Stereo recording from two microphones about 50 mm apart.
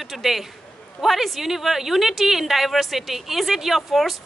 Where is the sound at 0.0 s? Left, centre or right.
Centre.